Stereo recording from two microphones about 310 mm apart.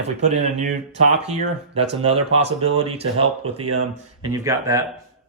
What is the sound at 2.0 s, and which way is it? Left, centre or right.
Speech, centre.